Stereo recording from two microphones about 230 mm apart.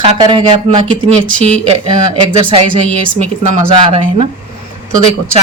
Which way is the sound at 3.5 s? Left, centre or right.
Right.